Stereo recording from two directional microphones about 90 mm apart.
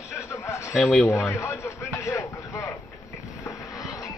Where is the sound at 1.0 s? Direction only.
30° left (ahead or behind).